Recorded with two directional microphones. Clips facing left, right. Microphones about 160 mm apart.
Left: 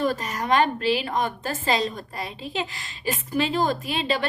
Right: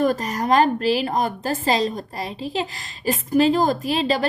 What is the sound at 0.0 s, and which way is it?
A woman's voice, 40° right (ahead or behind).